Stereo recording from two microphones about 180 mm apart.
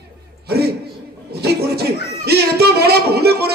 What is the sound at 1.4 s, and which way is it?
Speech, 60° right (ahead or behind).